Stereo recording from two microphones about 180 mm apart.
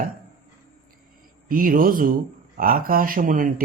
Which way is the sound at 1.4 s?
50° right (ahead or behind).